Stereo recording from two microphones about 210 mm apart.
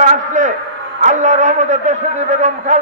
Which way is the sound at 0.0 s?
35° right (ahead or behind).